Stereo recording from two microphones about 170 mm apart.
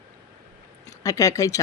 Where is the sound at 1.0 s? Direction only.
20° left (ahead or behind).